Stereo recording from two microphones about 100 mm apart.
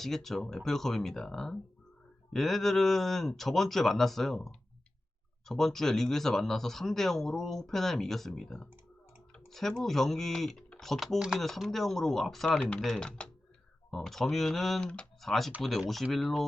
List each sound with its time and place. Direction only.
0.0 s speech: 5° left (ahead or behind)
11.2 s speech: 5° right (ahead or behind)